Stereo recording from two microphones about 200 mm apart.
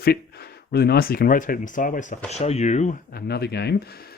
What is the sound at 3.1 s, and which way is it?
Speech, 55° left (ahead or behind).